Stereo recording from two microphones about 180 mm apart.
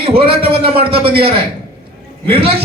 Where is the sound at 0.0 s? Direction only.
30° right (ahead or behind).